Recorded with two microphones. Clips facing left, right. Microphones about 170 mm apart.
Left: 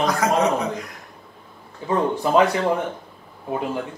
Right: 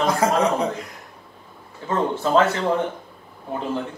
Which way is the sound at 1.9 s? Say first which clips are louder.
Left 1 dB; 15° left (ahead or behind).